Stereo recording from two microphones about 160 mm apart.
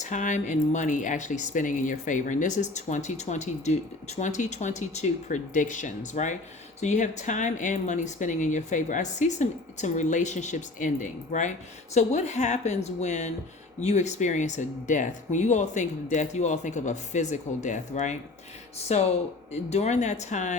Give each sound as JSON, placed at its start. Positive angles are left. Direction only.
{"t": 0.0, "sound": "speech", "side_deg": 50}